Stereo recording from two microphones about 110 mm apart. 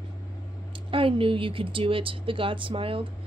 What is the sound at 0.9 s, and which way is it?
A woman's voice, 55° right (ahead or behind).